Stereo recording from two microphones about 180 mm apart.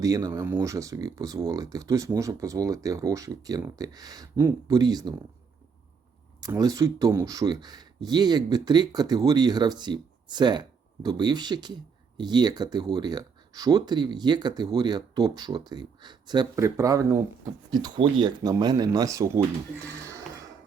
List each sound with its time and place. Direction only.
0.0 s speech: 20° right (ahead or behind)
6.4 s speech: 20° right (ahead or behind)